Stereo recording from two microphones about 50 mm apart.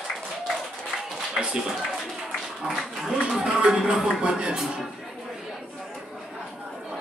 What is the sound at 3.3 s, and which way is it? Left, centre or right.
Music, centre.